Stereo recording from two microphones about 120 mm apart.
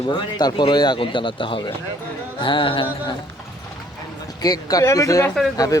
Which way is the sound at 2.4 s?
45° left (ahead or behind).